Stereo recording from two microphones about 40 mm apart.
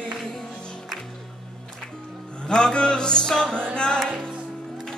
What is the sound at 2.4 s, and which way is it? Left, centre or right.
Music, left.